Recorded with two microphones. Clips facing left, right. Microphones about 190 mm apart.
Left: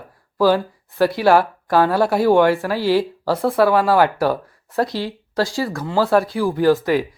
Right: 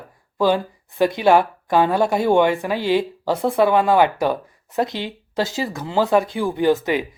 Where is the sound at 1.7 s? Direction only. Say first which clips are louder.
Left 1 dB; 20° right (ahead or behind).